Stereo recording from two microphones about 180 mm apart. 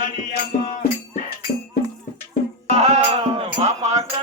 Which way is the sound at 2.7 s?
35° right (ahead or behind).